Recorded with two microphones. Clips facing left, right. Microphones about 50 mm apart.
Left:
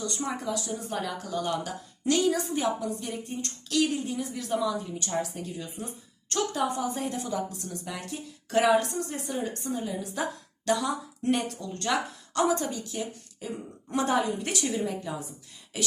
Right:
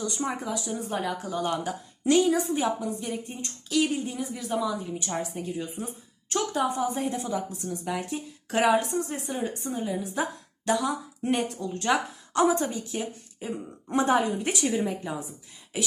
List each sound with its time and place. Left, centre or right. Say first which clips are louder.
0.0 s speech: right 1 dB; centre
2.5 s speech: right 1 dB; centre; by 9.4 s right
9.4 s speech: right 1 dB; centre
15.7 s a sound: right 1 dB; centre